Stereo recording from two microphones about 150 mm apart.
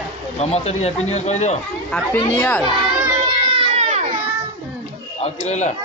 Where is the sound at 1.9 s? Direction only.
15° left (ahead or behind).